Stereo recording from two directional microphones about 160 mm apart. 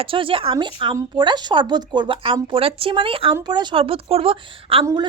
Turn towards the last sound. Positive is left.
turn(degrees=-35)  # may be behind; listen again after turning